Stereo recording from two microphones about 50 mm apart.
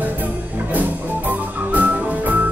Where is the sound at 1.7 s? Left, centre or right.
Right.